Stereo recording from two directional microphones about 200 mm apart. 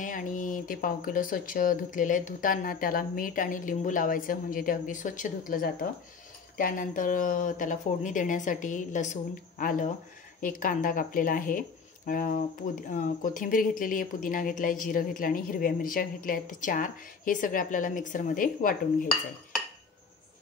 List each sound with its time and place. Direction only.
0.0 s speech: 40° left (ahead or behind)